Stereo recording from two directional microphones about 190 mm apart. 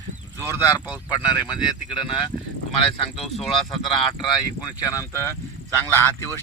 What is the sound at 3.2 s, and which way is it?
Speech, centre (ahead or behind).